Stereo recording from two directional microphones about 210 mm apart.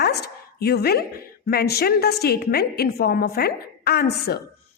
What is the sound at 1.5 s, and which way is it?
A woman's voice, 50° left (ahead or behind).